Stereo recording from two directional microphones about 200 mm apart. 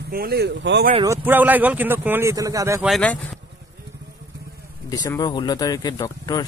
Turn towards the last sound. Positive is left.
turn(degrees=20)  # may be behind; listen again after turning